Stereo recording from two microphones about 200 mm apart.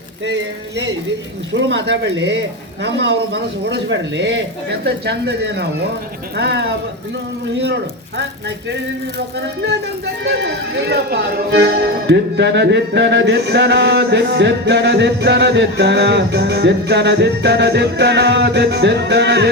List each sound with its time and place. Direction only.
1.5 s speech: 60° right (ahead or behind)
10.2 s speech: 60° right (ahead or behind)